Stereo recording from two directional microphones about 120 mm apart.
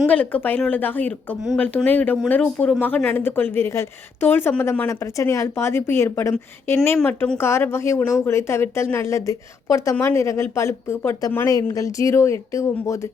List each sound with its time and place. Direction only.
0.1 s speech: 10° left (ahead or behind)
4.9 s speech: 25° left (ahead or behind)